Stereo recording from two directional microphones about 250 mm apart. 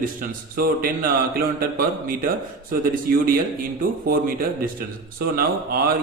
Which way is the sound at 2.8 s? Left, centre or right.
Right.